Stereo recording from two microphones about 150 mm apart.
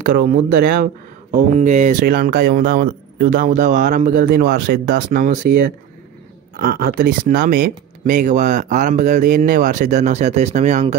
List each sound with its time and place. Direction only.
0.0 s speech: 75° right (ahead or behind)
1.5 s speech: 55° right (ahead or behind); by 5.7 s 70° right (ahead or behind)
6.6 s speech: 90° right; by 11.0 s 50° right (ahead or behind)